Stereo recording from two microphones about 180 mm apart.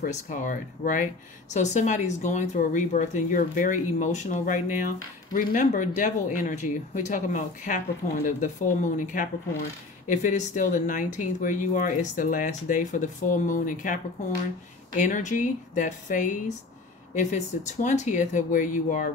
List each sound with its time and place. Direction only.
0.0 s speech: 45° left (ahead or behind)
15.0 s speech: 45° left (ahead or behind)